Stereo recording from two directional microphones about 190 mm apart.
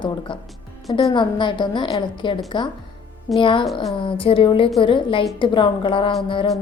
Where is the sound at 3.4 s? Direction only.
25° left (ahead or behind).